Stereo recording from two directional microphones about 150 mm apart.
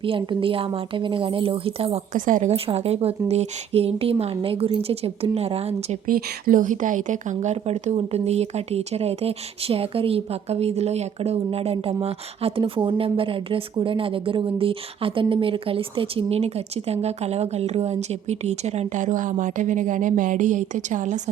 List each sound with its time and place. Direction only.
0.0 s speech: 35° right (ahead or behind)
2.1 s speech: 60° right (ahead or behind); by 6.0 s 45° right (ahead or behind)
6.1 s a woman's voice: 75° right (ahead or behind); by 21.2 s 55° right (ahead or behind)